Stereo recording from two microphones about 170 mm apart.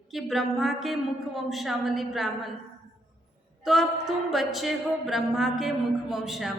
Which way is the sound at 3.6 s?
Centre (ahead or behind).